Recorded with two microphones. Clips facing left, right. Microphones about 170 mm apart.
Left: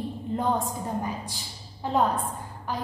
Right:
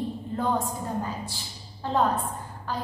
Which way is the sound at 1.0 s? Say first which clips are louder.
Even; 15° left (ahead or behind).